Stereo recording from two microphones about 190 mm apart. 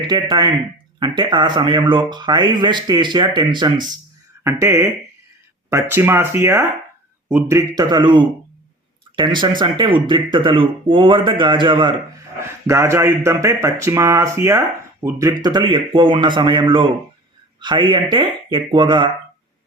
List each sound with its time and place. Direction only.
0.0 s speech: 25° right (ahead or behind)
12.4 s speech: 15° right (ahead or behind)